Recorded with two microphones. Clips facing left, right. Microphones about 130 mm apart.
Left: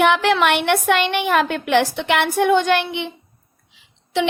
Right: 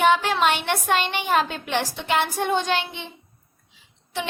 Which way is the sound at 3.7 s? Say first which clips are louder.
Left 9 dB; 90° left.